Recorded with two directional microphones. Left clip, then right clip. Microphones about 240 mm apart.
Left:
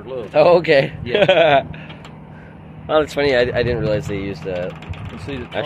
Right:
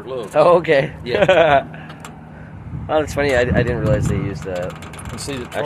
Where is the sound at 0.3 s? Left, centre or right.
Centre.